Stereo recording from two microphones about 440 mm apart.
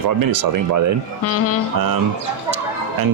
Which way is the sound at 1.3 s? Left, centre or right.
Left.